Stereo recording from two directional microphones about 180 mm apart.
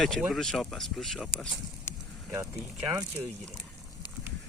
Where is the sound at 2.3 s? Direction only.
15° right (ahead or behind).